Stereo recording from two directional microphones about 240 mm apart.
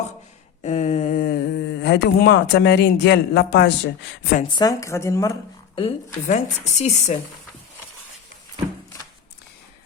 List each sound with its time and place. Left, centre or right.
0.6 s speech: left
4.5 s a woman's voice: centre